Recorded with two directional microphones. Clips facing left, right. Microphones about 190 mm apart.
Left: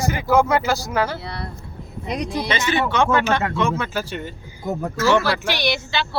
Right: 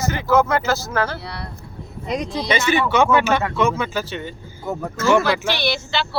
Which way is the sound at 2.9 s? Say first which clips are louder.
Right 2 dB; 5° right (ahead or behind).